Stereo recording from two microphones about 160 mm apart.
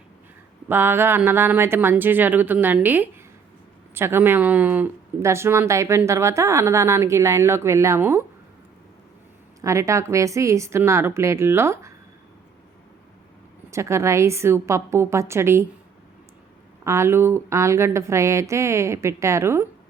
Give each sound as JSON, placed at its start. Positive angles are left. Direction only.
{"t": 0.7, "sound": "speech", "side_deg": -15}
{"t": 9.6, "sound": "speech", "side_deg": -20}
{"t": 13.7, "sound": "speech", "side_deg": -20}
{"t": 16.8, "sound": "speech", "side_deg": -15}